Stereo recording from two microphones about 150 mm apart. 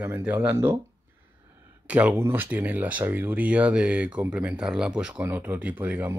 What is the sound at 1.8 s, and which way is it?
Speech, 10° right (ahead or behind).